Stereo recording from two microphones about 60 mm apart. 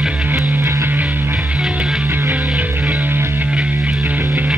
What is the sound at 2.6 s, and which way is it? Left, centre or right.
Music, right.